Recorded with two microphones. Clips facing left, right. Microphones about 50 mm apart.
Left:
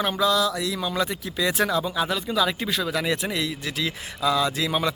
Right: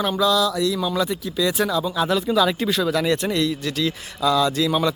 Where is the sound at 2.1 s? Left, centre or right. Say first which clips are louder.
Right 7 dB; centre.